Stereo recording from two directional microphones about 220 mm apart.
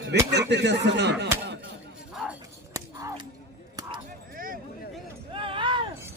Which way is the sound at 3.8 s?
20° right (ahead or behind).